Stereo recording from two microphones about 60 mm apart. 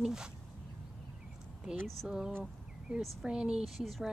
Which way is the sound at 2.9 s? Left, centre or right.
Centre.